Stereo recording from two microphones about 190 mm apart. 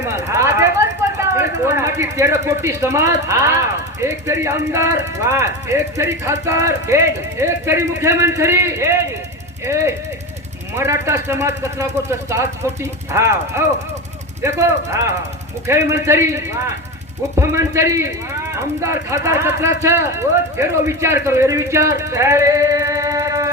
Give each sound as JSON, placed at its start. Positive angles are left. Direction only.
{"t": 0.0, "sound": "a sound", "side_deg": -15}
{"t": 1.3, "sound": "speech", "side_deg": -15}
{"t": 19.1, "sound": "speech", "side_deg": -15}